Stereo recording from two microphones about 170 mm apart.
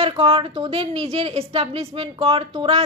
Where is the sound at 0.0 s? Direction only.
30° right (ahead or behind).